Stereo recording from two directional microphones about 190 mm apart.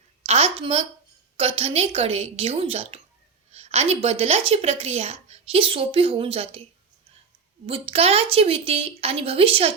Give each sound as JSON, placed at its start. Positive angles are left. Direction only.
{"t": 0.3, "sound": "a woman's voice", "side_deg": -30}
{"t": 7.7, "sound": "a woman's voice", "side_deg": -30}